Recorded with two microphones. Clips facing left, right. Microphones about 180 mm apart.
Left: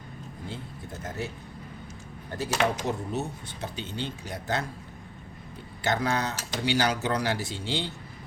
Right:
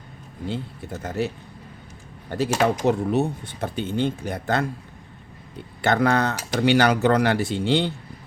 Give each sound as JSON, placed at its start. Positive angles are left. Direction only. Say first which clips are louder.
{"t": 1.0, "sound": "speech", "louder": "right 9 dB", "side_deg": -70}
{"t": 2.3, "sound": "speech", "louder": "right 6 dB", "side_deg": -70}
{"t": 5.8, "sound": "speech", "louder": "right 7 dB", "side_deg": -60}